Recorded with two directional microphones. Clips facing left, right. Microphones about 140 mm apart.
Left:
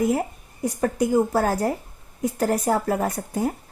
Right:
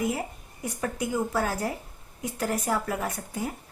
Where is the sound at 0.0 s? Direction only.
45° left (ahead or behind).